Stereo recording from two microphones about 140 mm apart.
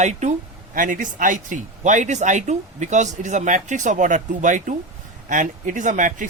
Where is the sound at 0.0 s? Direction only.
55° right (ahead or behind).